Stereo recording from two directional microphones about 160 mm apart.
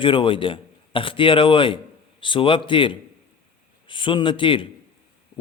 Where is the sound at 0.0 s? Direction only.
35° left (ahead or behind).